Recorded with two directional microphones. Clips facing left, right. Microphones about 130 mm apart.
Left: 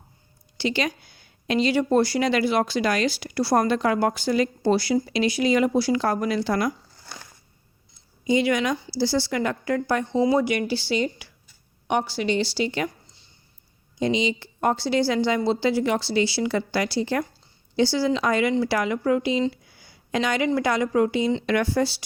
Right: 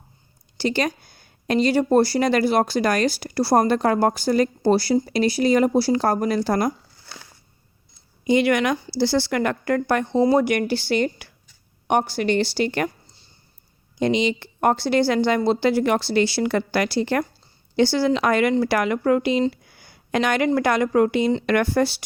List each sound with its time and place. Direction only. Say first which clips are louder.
0.5 s speech: right 3 dB; 40° right (ahead or behind)
8.3 s a woman's voice: right 3 dB; 65° right (ahead or behind)
14.0 s a woman's voice: right 3 dB; 60° right (ahead or behind)